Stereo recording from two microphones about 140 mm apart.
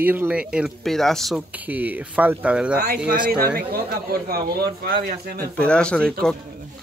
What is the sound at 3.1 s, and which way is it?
Speech, 85° right.